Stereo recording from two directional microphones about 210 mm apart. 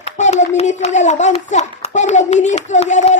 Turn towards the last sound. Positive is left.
turn(degrees=35)  # may be behind; listen again after turning